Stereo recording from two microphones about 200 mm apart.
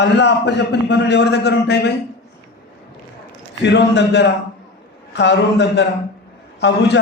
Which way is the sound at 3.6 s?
60° left (ahead or behind).